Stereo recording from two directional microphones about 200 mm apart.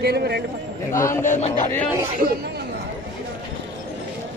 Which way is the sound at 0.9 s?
15° left (ahead or behind).